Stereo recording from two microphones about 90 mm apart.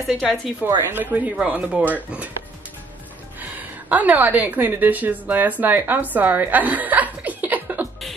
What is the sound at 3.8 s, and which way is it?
A woman's voice, 15° right (ahead or behind).